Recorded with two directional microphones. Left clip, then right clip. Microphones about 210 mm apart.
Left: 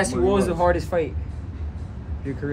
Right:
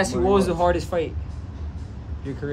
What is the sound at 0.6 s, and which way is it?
Speech, 20° right (ahead or behind).